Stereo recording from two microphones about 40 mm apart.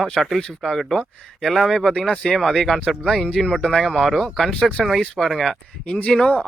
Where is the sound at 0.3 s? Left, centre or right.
Centre.